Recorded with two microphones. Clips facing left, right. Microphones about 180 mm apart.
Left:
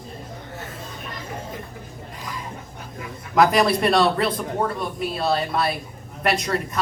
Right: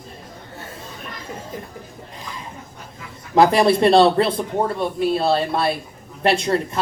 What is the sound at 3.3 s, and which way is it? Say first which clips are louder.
A man's voice: right 3 dB; 30° right (ahead or behind).